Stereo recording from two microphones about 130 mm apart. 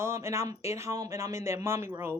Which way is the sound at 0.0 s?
20° right (ahead or behind).